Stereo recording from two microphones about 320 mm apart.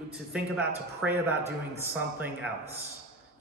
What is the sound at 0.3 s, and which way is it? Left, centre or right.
A man's voice, centre.